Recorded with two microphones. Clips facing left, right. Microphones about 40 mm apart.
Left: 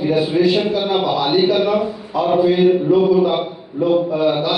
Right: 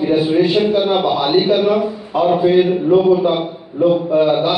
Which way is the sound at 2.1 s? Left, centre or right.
Right.